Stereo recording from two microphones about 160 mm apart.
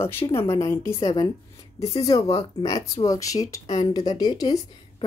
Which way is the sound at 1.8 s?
40° left (ahead or behind).